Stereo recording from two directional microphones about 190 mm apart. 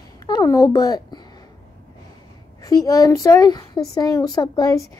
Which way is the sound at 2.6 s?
20° left (ahead or behind).